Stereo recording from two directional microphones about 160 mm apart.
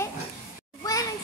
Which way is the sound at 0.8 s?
20° left (ahead or behind).